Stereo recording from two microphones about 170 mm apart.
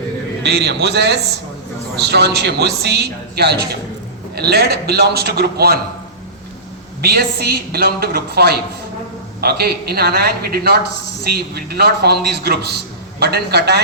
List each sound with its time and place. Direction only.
0.4 s a man's voice: 80° right
7.0 s a man's voice: 70° right (ahead or behind)